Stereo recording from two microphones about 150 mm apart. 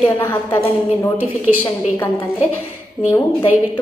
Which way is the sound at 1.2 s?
10° right (ahead or behind).